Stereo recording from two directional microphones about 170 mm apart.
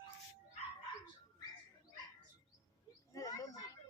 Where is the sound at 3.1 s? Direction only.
20° left (ahead or behind).